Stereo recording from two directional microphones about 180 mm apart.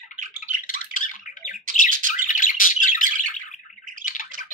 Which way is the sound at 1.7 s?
50° right (ahead or behind).